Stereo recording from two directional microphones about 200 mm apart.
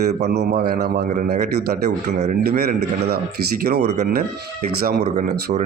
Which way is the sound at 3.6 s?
50° right (ahead or behind).